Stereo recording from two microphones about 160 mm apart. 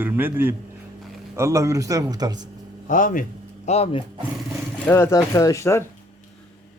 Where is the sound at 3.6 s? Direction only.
40° left (ahead or behind).